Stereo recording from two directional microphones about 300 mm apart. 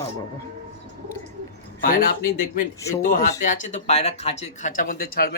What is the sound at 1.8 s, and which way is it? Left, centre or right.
Speech, left.